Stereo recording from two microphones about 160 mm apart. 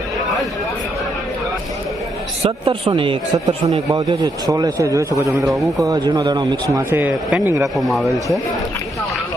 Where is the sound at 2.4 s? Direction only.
30° right (ahead or behind).